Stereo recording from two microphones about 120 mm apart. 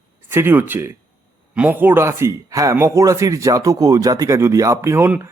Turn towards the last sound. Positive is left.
turn(degrees=-15)  # may be behind; listen again after turning